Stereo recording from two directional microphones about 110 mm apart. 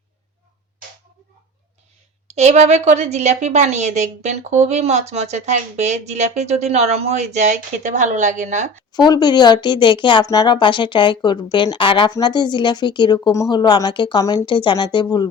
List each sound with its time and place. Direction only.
2.3 s a woman's voice: 80° right
8.9 s speech: 40° left (ahead or behind)
12.1 s speech: 40° left (ahead or behind)